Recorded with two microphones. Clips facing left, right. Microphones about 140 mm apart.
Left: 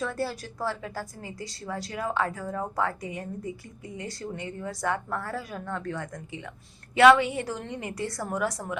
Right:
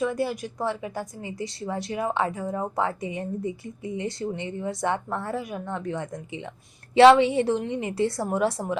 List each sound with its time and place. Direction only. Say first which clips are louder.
0.0 s a woman's voice: right 5 dB; 15° right (ahead or behind)